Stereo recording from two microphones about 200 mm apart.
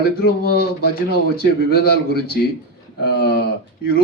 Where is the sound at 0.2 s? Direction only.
50° left (ahead or behind).